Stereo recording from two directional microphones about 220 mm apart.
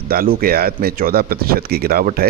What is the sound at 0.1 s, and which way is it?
Speech, 40° right (ahead or behind).